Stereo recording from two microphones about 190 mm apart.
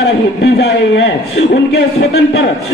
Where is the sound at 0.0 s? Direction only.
65° left (ahead or behind).